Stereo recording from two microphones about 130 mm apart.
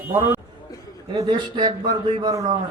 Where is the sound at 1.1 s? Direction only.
35° right (ahead or behind).